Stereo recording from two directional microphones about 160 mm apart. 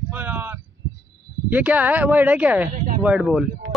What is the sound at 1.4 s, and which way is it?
Speech, 10° right (ahead or behind).